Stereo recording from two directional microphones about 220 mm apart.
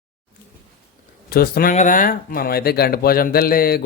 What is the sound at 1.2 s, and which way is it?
Speech, 45° left (ahead or behind).